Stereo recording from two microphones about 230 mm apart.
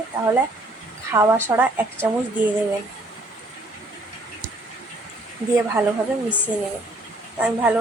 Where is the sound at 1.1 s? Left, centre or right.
Centre.